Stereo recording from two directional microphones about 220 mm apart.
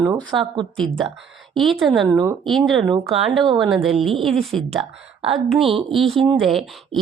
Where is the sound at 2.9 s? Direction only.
25° right (ahead or behind).